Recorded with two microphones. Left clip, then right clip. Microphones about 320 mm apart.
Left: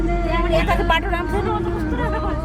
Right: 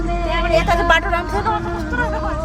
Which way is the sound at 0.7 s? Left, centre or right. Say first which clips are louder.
Right 4 dB; right.